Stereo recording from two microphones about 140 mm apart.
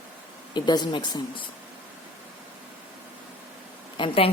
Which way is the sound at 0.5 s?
30° left (ahead or behind).